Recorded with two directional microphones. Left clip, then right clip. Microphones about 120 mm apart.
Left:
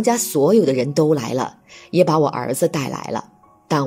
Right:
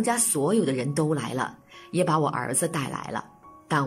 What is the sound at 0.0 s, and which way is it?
Speech, 30° left (ahead or behind).